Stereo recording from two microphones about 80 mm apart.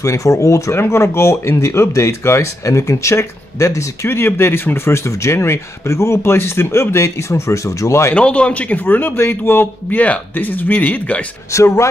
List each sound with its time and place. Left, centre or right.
0.0 s speech: left
8.1 s a man's voice: centre
11.5 s speech: left